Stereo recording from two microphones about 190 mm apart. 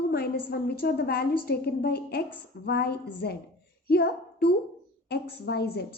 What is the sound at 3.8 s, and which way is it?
Child singing, 55° left (ahead or behind).